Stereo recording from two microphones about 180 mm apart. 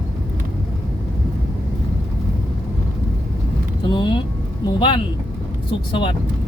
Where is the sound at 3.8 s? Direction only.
25° left (ahead or behind).